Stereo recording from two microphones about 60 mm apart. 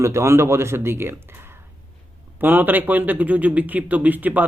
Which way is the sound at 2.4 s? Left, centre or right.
Right.